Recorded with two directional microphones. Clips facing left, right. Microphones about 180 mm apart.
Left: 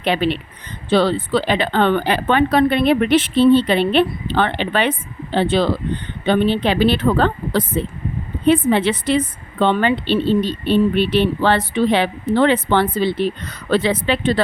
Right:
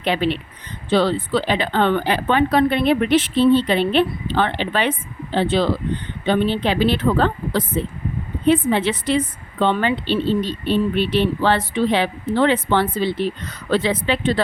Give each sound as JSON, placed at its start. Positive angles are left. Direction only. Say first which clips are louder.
{"t": 0.0, "sound": "a woman's voice", "louder": "left 2 dB", "side_deg": 65}